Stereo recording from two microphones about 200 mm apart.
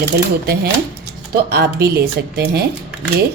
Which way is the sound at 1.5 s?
50° right (ahead or behind).